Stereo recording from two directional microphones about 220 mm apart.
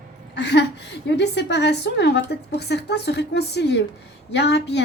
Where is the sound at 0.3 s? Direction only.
50° left (ahead or behind).